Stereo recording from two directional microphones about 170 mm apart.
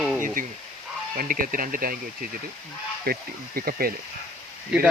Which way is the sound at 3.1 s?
60° right (ahead or behind).